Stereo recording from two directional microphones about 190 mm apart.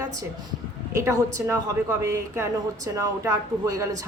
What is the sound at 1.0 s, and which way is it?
A woman's voice, 15° right (ahead or behind).